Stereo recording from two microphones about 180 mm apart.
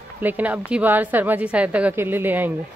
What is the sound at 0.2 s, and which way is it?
A woman's voice, 10° right (ahead or behind).